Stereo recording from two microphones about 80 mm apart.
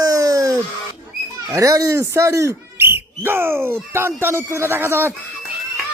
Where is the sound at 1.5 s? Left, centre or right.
Right.